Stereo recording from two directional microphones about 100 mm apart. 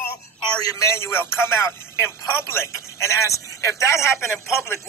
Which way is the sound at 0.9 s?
25° left (ahead or behind).